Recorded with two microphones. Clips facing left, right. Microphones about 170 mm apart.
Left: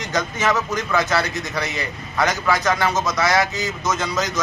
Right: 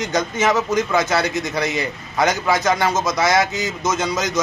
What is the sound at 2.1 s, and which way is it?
A man's voice, 20° right (ahead or behind).